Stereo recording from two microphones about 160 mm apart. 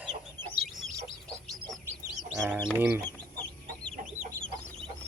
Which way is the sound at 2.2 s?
15° right (ahead or behind).